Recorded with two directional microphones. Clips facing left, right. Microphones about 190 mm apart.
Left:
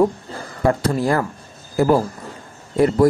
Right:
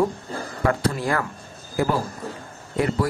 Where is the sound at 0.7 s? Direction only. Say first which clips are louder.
Left 5 dB; 35° left (ahead or behind).